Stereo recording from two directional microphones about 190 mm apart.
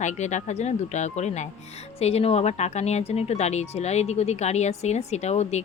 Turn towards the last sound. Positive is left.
turn(degrees=35)  # may be behind; listen again after turning